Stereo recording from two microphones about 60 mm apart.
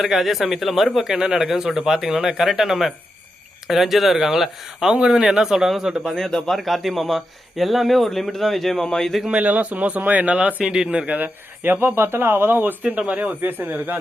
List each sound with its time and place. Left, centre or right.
0.0 s a man's voice: centre
6.0 s a man's voice: centre
9.2 s speech: right
13.0 s speech: right